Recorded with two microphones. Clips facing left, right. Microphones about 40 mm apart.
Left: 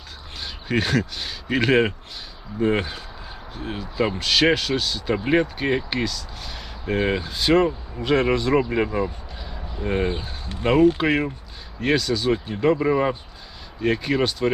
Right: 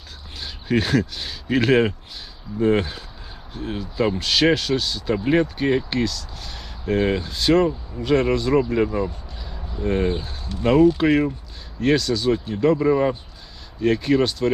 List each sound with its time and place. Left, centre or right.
0.3 s speech: centre
10.5 s speech: left
10.9 s speech: centre